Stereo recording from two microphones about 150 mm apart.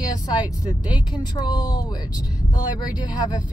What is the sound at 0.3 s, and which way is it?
Speech, 30° left (ahead or behind).